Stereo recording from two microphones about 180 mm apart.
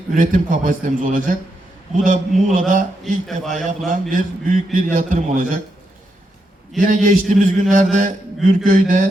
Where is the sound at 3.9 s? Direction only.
45° right (ahead or behind).